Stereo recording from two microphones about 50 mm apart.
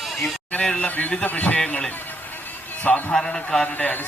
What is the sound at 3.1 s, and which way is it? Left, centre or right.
Speech, centre.